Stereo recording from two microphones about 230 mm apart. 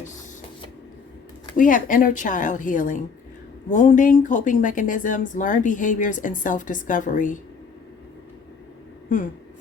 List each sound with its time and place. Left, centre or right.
1.5 s speech: left